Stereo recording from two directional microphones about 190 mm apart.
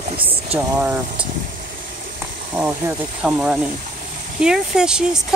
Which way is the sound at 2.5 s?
10° right (ahead or behind).